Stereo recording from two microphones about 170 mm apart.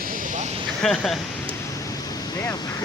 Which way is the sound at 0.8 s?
Centre (ahead or behind).